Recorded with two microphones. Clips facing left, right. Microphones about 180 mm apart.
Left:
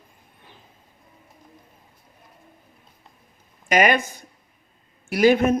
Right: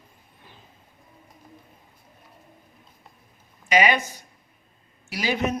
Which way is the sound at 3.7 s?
50° left (ahead or behind).